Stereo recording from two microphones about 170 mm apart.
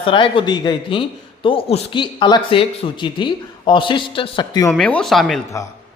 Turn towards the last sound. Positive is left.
turn(degrees=0)  # may be behind; listen again after turning